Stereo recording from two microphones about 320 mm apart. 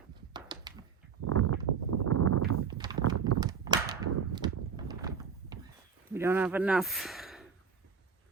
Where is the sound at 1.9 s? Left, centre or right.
Right.